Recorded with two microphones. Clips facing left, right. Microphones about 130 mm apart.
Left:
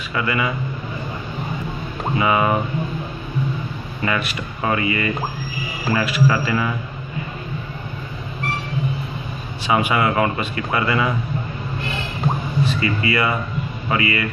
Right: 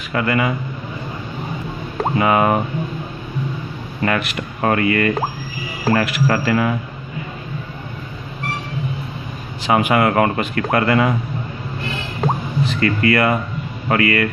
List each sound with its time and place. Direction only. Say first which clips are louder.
0.1 s speech: right 4 dB; 50° right (ahead or behind)
2.1 s speech: right 2 dB; 55° right (ahead or behind)
4.0 s speech: right 3 dB; 55° right (ahead or behind)
9.7 s speech: right 3 dB; 55° right (ahead or behind)
12.8 s speech: right 8 dB; 55° right (ahead or behind)